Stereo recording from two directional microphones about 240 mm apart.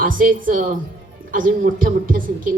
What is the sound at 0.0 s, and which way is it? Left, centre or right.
A woman's voice, right.